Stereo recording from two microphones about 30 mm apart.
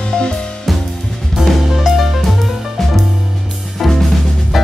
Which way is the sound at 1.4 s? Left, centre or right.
Right.